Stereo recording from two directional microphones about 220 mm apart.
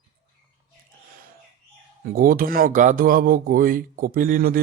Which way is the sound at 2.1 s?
40° right (ahead or behind).